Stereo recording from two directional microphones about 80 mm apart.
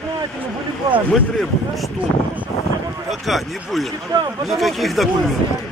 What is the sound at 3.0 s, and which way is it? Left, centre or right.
Speech, centre.